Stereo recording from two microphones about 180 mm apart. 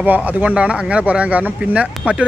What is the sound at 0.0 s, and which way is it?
Speech, 10° right (ahead or behind).